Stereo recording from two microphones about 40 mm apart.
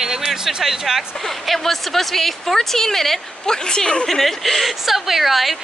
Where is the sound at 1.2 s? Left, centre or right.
Centre.